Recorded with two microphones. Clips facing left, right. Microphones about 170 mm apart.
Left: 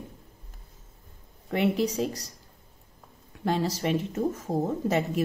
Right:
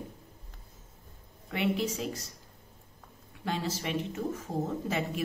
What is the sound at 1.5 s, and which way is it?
Speech, 40° left (ahead or behind).